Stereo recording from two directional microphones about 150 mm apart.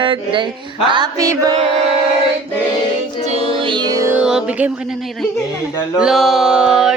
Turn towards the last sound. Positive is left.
turn(degrees=-5)  # may be behind; listen again after turning